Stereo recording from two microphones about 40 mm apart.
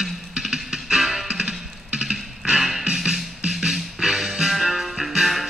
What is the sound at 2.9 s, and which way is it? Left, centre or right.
Music, centre.